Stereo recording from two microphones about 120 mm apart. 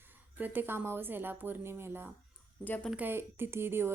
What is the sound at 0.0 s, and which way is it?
A woman's voice, 15° right (ahead or behind).